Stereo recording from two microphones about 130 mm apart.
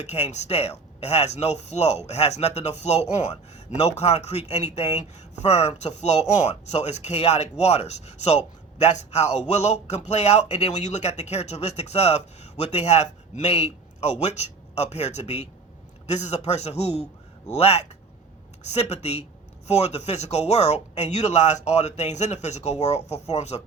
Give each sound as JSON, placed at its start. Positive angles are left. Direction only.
{"t": 0.1, "sound": "speech", "side_deg": 60}